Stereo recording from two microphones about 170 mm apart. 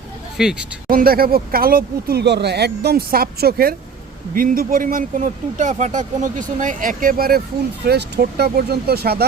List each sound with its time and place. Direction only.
0.4 s speech: 5° right (ahead or behind)
0.9 s speech: 60° right (ahead or behind)
7.9 s speech: 75° right (ahead or behind)